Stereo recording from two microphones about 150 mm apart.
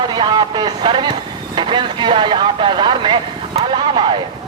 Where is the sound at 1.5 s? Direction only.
30° right (ahead or behind).